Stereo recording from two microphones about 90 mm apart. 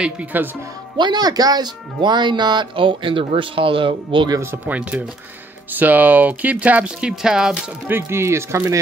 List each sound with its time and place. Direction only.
0.0 s speech: 15° right (ahead or behind)
0.9 s speech: 55° right (ahead or behind)
2.0 s speech: 55° right (ahead or behind); by 4.3 s 70° right (ahead or behind)
4.4 s speech: 25° right (ahead or behind)
5.8 s speech: 20° right (ahead or behind)
7.9 s speech: 30° right (ahead or behind)